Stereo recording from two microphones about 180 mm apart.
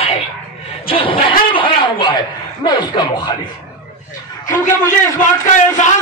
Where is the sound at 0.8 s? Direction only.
30° left (ahead or behind).